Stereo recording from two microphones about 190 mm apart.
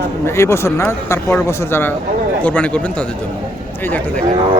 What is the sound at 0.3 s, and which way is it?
Speech, 15° left (ahead or behind).